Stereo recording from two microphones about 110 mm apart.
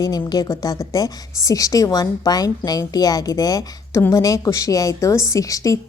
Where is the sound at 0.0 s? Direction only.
35° left (ahead or behind).